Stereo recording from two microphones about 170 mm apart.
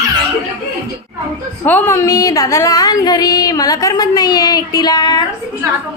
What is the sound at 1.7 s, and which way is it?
A woman's voice, 10° left (ahead or behind).